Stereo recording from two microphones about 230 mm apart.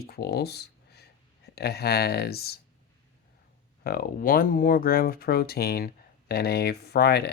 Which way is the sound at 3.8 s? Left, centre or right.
Left.